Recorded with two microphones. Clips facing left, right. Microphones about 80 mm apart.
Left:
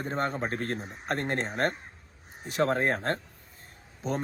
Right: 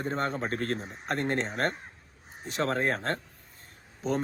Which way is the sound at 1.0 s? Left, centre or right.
Left.